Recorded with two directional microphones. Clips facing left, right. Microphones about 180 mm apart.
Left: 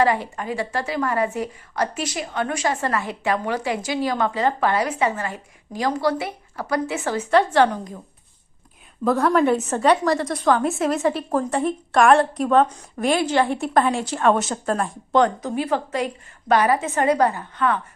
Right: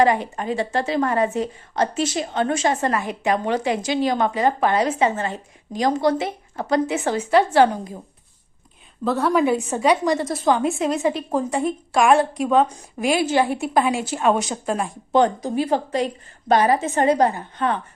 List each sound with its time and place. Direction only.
0.0 s a woman's voice: 20° right (ahead or behind)
9.0 s a woman's voice: 5° right (ahead or behind)
10.2 s a woman's voice: centre (ahead or behind)
11.3 s a woman's voice: 20° right (ahead or behind)
11.6 s a woman's voice: centre (ahead or behind)
15.5 s a woman's voice: 30° right (ahead or behind)